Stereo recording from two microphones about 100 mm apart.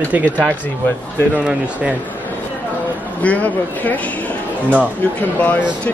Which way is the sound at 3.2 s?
15° left (ahead or behind).